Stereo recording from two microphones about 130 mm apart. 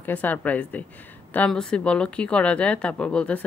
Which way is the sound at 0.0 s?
15° left (ahead or behind).